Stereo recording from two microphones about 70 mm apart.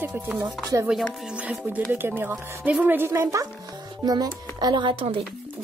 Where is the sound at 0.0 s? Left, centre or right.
Right.